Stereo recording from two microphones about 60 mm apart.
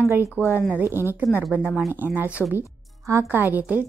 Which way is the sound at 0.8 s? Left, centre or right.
Right.